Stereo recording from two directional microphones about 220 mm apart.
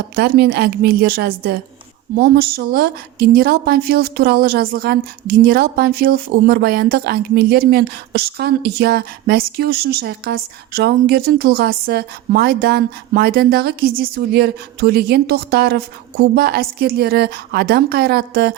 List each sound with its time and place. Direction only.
0.2 s speech: 45° right (ahead or behind)